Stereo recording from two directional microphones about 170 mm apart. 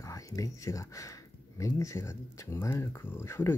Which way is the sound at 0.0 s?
20° left (ahead or behind).